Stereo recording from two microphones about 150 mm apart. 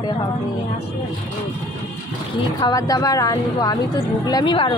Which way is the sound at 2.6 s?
25° left (ahead or behind).